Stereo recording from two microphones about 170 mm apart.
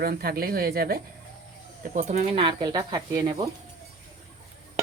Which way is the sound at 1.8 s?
45° right (ahead or behind).